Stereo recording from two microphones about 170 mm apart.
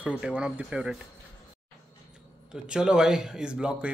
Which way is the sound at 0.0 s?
5° right (ahead or behind).